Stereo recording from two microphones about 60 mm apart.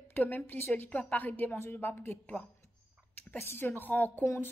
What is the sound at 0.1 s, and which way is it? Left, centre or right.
A woman's voice, left.